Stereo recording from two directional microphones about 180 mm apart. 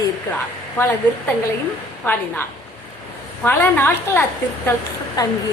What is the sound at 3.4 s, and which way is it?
Speech, 10° left (ahead or behind).